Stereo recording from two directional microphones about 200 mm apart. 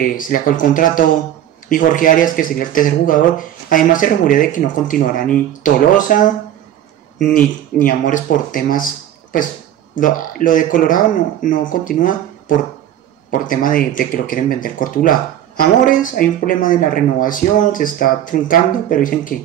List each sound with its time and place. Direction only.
0.0 s speech: 45° left (ahead or behind)
9.9 s speech: 40° left (ahead or behind)